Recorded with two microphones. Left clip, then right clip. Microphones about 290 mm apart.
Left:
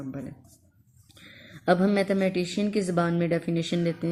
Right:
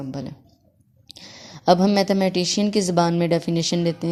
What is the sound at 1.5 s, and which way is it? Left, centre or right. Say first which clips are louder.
A woman's voice: right 6 dB; centre.